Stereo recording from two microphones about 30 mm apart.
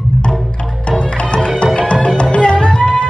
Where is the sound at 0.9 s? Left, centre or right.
Left.